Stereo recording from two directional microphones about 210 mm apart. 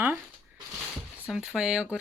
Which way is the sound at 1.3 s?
Centre (ahead or behind).